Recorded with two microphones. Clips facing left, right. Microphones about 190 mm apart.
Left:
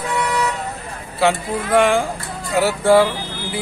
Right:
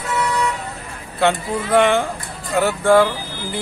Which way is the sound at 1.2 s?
Centre (ahead or behind).